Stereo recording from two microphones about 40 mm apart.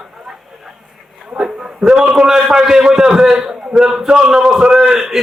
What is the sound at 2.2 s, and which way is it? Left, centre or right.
A man's voice, centre.